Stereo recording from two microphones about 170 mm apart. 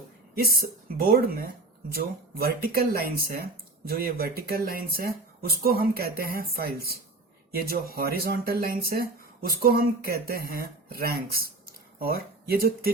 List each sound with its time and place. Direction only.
0.3 s speech: 60° right (ahead or behind)